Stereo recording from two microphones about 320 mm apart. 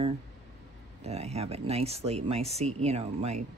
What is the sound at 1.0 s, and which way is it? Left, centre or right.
Speech, centre.